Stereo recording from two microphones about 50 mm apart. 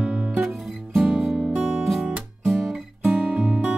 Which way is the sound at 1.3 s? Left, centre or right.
Right.